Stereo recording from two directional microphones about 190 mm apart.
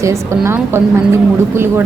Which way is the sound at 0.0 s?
15° right (ahead or behind).